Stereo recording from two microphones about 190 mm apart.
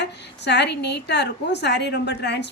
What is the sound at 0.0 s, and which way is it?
A woman's voice, 65° left (ahead or behind).